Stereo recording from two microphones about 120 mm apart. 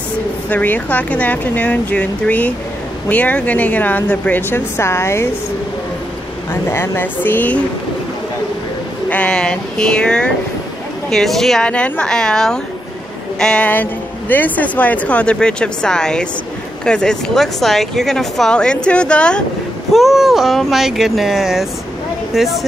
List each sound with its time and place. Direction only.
0.5 s speech: 15° left (ahead or behind)
6.5 s speech: 20° left (ahead or behind)
9.1 s speech: 10° left (ahead or behind)